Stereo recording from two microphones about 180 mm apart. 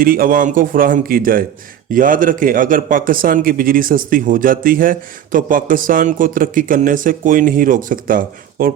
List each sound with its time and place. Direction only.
0.0 s a man's voice: 55° right (ahead or behind)